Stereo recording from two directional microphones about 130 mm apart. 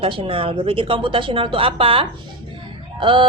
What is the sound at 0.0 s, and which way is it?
A woman's voice, 45° right (ahead or behind).